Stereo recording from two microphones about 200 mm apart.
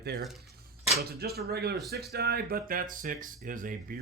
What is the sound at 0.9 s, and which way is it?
Speech, 50° right (ahead or behind).